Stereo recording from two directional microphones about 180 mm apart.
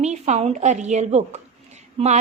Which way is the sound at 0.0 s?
40° right (ahead or behind).